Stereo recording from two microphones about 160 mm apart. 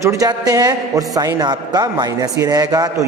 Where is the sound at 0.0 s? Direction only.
20° right (ahead or behind).